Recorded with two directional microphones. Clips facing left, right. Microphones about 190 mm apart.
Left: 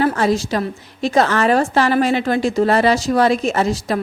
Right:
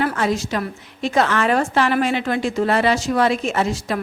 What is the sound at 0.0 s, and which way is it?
A woman's voice, 35° left (ahead or behind).